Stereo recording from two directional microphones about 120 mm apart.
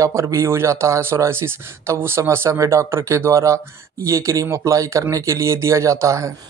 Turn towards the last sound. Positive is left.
turn(degrees=-25)  # may be behind; listen again after turning